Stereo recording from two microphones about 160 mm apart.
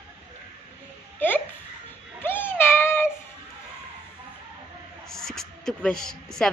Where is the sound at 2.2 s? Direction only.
15° left (ahead or behind).